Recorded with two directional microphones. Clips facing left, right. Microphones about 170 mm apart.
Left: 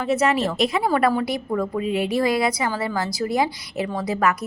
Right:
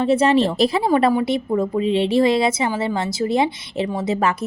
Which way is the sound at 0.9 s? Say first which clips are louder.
Right 3 dB; 20° right (ahead or behind).